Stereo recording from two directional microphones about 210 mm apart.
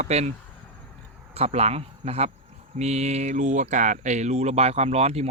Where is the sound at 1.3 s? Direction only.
30° right (ahead or behind).